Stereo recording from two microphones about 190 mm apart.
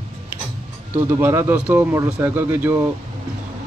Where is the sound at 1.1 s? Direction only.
15° right (ahead or behind).